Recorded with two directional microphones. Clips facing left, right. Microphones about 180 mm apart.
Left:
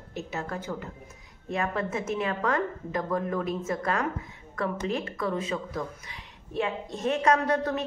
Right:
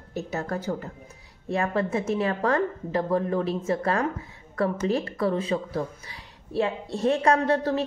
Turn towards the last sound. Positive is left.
turn(degrees=-30)  # may be behind; listen again after turning